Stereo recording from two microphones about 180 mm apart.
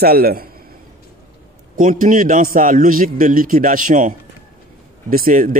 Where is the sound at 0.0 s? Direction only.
55° right (ahead or behind).